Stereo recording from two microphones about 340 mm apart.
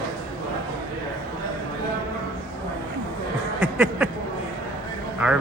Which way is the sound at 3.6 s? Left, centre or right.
Centre.